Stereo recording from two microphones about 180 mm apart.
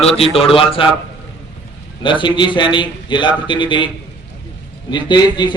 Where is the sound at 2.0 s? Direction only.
25° left (ahead or behind).